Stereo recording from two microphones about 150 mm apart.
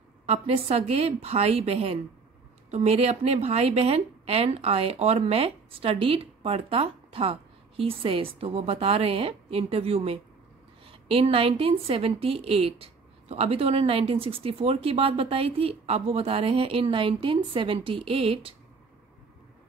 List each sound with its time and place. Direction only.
0.3 s a woman's voice: 45° right (ahead or behind)